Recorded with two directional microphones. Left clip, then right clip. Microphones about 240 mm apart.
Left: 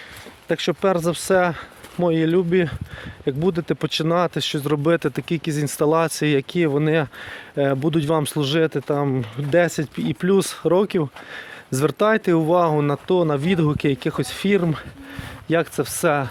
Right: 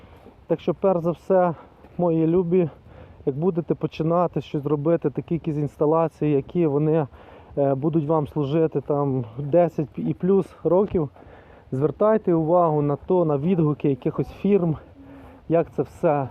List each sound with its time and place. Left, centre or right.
0.4 s speech: left
15.4 s speech: left